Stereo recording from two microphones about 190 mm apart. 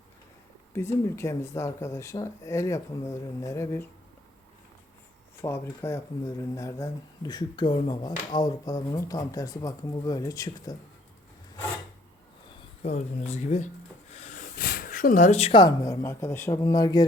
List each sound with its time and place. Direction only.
0.7 s speech: 15° left (ahead or behind)
5.4 s speech: 15° left (ahead or behind)
12.8 s speech: 35° left (ahead or behind); by 17.1 s 20° left (ahead or behind)